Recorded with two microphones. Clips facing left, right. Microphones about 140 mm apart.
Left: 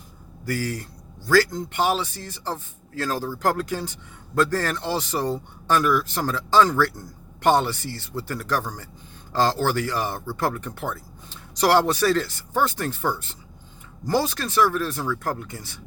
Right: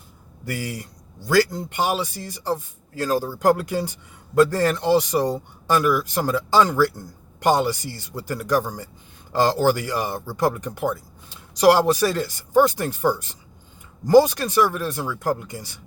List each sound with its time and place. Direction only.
0.4 s a man's voice: 20° right (ahead or behind)
2.9 s speech: 15° right (ahead or behind)